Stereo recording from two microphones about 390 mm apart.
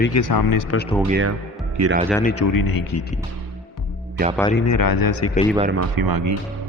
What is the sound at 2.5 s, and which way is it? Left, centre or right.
Speech, left.